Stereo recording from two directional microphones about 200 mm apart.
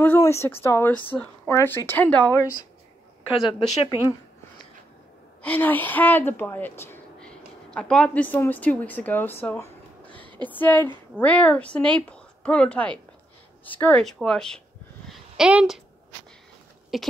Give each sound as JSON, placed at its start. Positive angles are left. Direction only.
{"t": 0.0, "sound": "speech", "side_deg": 10}
{"t": 3.4, "sound": "speech", "side_deg": 25}
{"t": 5.4, "sound": "a woman's voice", "side_deg": 10}
{"t": 15.0, "sound": "a sound", "side_deg": -5}
{"t": 16.9, "sound": "speech", "side_deg": 0}